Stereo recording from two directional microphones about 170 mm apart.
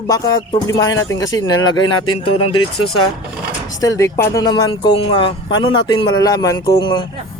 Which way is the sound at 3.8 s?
20° left (ahead or behind).